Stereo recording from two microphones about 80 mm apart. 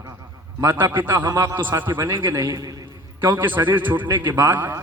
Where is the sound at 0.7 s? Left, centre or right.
Right.